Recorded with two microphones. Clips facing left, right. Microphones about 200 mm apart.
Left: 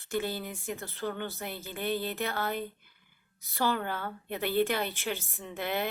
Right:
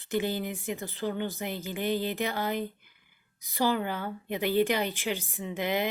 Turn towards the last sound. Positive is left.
turn(degrees=-15)  # may be behind; listen again after turning